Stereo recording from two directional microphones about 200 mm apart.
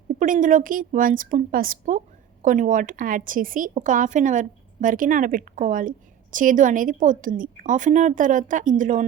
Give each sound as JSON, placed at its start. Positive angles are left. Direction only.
{"t": 0.2, "sound": "a woman's voice", "side_deg": -40}